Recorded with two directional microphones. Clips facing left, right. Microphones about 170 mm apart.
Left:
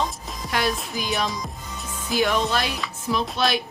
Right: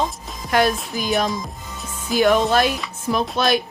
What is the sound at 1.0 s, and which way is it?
A woman's voice, 45° right (ahead or behind).